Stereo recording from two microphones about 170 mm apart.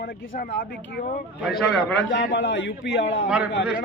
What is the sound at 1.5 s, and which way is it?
Speech, centre (ahead or behind).